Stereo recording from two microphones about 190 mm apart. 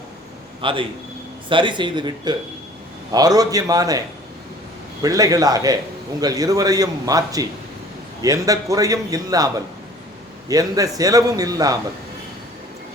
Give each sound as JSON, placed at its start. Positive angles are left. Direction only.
{"t": 0.6, "sound": "a man's voice", "side_deg": -25}
{"t": 5.0, "sound": "a man's voice", "side_deg": -20}
{"t": 10.5, "sound": "a man's voice", "side_deg": -20}